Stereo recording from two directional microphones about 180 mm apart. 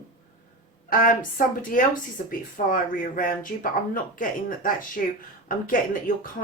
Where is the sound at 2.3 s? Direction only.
50° left (ahead or behind).